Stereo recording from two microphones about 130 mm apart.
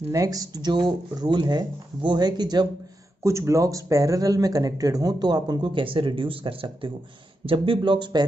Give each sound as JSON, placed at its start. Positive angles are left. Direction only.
{"t": 0.1, "sound": "speech", "side_deg": -25}
{"t": 3.3, "sound": "speech", "side_deg": -20}